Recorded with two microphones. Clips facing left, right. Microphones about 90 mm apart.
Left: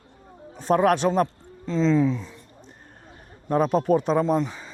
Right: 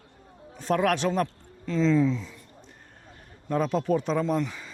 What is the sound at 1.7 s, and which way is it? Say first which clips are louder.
Speech: left 2 dB; 25° left (ahead or behind).